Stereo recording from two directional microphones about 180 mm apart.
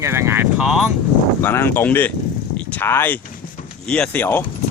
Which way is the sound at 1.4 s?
15° left (ahead or behind).